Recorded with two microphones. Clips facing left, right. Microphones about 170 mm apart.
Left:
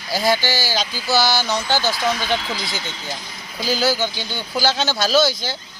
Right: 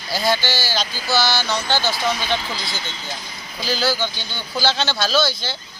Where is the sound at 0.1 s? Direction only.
15° left (ahead or behind).